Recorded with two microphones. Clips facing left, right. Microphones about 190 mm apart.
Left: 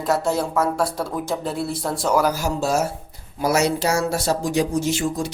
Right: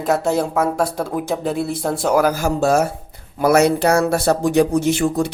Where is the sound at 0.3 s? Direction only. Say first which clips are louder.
Right 3 dB; 55° right (ahead or behind).